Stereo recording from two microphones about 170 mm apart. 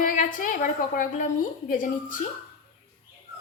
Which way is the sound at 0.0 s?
50° left (ahead or behind).